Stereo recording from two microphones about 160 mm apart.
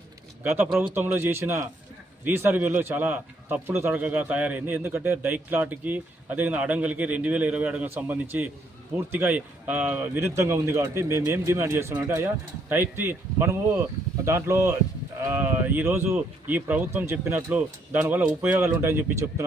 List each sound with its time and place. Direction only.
0.4 s speech: 15° right (ahead or behind)